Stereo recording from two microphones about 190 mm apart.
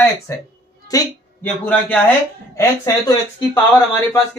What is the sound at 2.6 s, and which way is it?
A man's voice, 15° left (ahead or behind).